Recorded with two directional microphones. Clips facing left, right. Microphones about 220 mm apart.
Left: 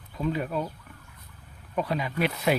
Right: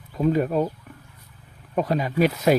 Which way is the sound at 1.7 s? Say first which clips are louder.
Right 6 dB; 40° right (ahead or behind).